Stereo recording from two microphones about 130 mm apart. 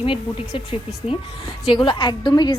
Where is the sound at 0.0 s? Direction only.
45° left (ahead or behind).